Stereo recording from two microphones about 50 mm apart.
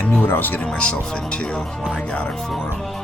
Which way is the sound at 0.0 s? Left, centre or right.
Left.